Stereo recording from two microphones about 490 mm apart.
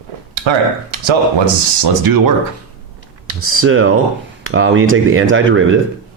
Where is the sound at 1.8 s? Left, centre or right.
Right.